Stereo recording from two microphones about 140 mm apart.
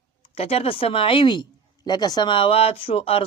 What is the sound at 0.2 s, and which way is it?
Speech, 45° left (ahead or behind).